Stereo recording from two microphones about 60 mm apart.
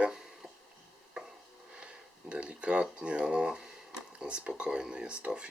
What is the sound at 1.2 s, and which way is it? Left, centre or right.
Stir, centre.